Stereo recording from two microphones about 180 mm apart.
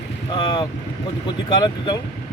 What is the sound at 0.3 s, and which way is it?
Speech, 25° left (ahead or behind).